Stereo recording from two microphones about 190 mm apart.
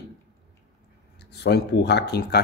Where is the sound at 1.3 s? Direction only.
60° left (ahead or behind).